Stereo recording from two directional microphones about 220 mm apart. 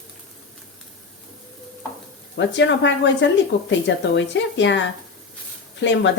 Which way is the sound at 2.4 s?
55° left (ahead or behind).